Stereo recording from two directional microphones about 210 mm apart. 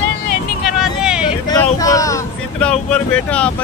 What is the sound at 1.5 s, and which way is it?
Vehicle, 15° left (ahead or behind).